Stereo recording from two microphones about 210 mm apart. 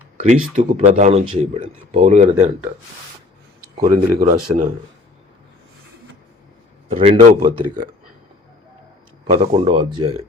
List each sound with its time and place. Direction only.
0.2 s speech: 35° right (ahead or behind)
3.8 s speech: 35° right (ahead or behind)
6.9 s speech: 25° right (ahead or behind)
9.2 s speech: 25° right (ahead or behind)